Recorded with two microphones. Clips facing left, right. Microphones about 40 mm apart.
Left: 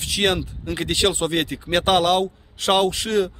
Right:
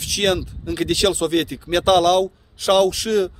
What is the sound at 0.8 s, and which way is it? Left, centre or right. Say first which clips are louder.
A man's voice: right 2 dB; left.